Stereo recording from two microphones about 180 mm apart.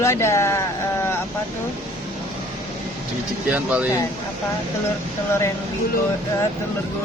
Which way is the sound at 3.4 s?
10° right (ahead or behind).